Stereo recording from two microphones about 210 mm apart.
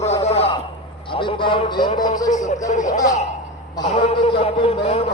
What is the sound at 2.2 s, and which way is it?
Speech, 35° left (ahead or behind).